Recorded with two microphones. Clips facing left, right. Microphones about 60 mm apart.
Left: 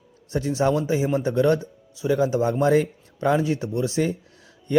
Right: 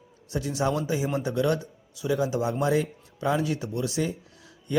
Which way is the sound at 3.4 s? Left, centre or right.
Left.